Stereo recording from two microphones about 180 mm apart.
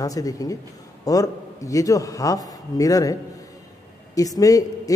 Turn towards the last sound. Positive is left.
turn(degrees=20)  # may be behind; listen again after turning